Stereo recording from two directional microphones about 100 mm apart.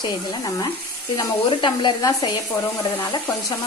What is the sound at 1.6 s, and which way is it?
Frying, 55° left (ahead or behind).